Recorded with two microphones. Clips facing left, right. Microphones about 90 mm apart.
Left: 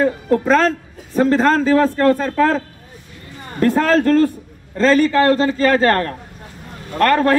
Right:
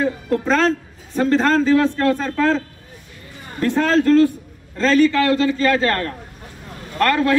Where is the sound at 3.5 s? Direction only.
40° left (ahead or behind).